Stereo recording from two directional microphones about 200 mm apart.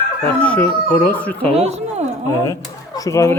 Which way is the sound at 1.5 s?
30° right (ahead or behind).